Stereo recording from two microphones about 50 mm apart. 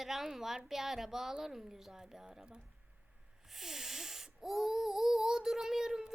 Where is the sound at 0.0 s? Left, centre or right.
Centre.